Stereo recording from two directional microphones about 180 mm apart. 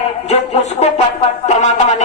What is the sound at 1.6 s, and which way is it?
Speech, 40° left (ahead or behind).